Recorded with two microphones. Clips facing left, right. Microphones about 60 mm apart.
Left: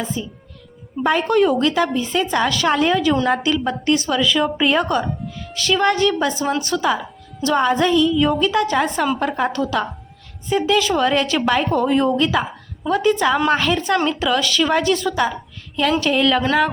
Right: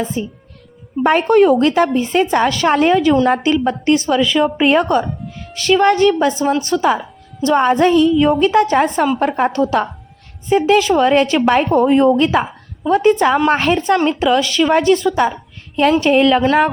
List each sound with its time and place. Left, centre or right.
0.2 s a woman's voice: right